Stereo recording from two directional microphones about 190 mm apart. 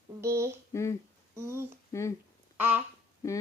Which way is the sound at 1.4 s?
15° right (ahead or behind).